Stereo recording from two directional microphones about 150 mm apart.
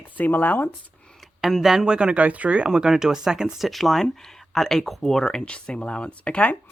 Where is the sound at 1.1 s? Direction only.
Centre (ahead or behind).